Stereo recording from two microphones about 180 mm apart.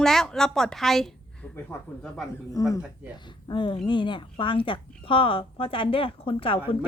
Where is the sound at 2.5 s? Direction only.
20° left (ahead or behind).